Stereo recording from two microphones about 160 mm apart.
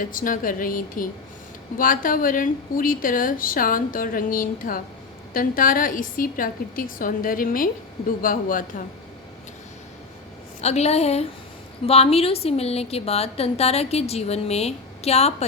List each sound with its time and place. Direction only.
0.0 s a woman's voice: 60° left (ahead or behind)
10.6 s a woman's voice: 45° left (ahead or behind)